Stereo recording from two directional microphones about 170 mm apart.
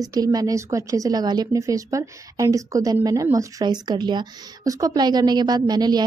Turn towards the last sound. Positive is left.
turn(degrees=-25)  # may be behind; listen again after turning